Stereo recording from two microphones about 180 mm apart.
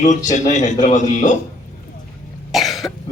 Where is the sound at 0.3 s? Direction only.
40° left (ahead or behind).